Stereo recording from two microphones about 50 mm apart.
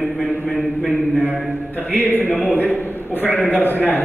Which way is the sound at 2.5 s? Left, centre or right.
Left.